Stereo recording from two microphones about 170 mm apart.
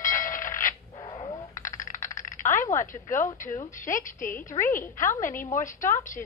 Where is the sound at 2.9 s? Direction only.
50° left (ahead or behind).